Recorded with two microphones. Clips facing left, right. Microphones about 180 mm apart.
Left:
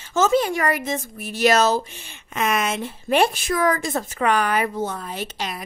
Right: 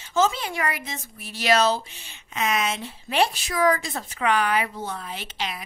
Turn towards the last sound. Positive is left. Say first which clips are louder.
# left 3 dB
turn(degrees=45)  # may be behind; listen again after turning